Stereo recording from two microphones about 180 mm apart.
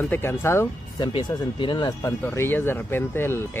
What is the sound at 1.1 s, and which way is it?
Speech, 25° left (ahead or behind).